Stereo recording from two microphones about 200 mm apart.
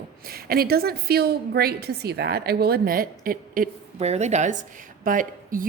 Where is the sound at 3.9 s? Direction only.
35° right (ahead or behind).